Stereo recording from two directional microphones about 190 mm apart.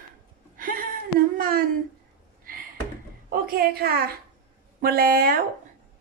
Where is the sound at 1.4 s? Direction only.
50° right (ahead or behind).